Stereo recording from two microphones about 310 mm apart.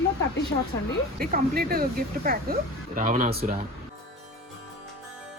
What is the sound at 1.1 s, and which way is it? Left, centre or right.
Speech, right.